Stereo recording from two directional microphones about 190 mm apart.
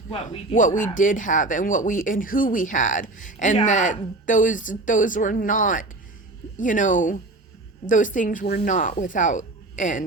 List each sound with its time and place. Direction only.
0.5 s speech: 45° left (ahead or behind)